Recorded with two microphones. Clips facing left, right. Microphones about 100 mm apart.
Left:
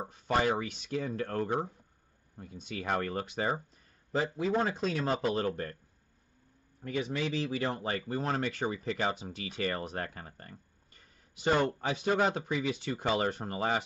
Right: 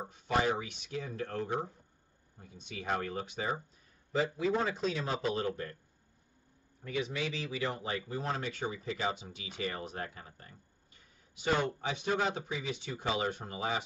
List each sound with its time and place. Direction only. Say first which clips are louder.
0.1 s speech: left 2 dB; 50° left (ahead or behind)
4.1 s speech: left 1 dB; 40° left (ahead or behind)
6.8 s speech: left 2 dB; 45° left (ahead or behind)
12.4 s speech: left 5 dB; 65° left (ahead or behind)